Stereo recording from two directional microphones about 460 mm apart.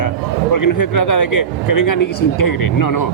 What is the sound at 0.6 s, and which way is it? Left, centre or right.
A man's voice, left.